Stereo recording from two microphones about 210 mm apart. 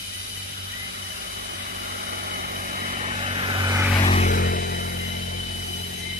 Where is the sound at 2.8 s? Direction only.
30° right (ahead or behind); by 3.9 s 15° right (ahead or behind).